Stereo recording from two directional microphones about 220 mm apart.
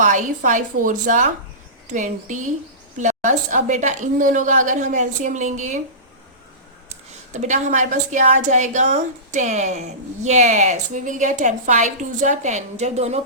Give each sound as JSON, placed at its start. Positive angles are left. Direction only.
{"t": 0.0, "sound": "a woman's voice", "side_deg": -35}
{"t": 7.3, "sound": "a woman's voice", "side_deg": -35}